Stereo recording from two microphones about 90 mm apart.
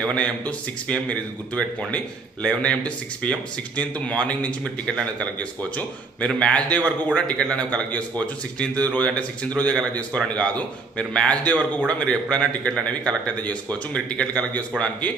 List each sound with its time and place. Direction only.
0.0 s speech: 15° left (ahead or behind)